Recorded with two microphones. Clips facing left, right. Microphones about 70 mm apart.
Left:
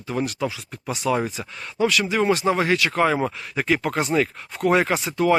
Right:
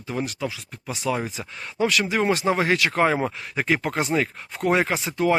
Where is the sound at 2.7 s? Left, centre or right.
Right.